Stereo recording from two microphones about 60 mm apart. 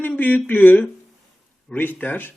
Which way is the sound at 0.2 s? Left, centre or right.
Left.